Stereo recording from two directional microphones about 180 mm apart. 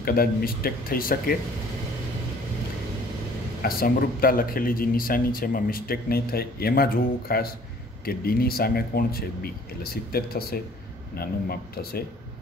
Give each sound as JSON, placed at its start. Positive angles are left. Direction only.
{"t": 0.0, "sound": "a man's voice", "side_deg": 55}
{"t": 3.6, "sound": "a man's voice", "side_deg": 55}